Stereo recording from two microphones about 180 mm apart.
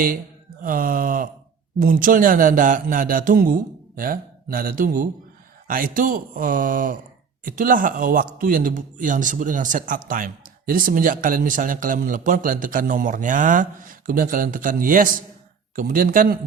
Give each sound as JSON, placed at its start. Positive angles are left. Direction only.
{"t": 0.6, "sound": "speech", "side_deg": -50}